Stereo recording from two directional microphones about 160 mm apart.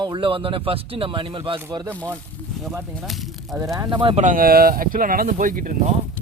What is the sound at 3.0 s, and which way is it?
Speech, centre (ahead or behind).